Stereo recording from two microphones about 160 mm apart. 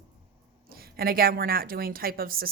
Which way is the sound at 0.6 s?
70° right (ahead or behind).